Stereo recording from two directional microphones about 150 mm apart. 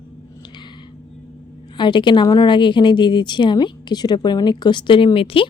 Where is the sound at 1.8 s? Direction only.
30° left (ahead or behind).